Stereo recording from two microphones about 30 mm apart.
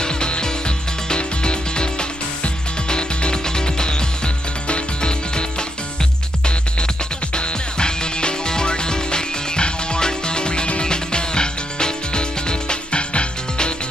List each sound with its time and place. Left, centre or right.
0.0 s music: left
7.3 s music: left